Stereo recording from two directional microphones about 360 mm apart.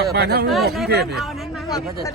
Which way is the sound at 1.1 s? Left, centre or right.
Centre.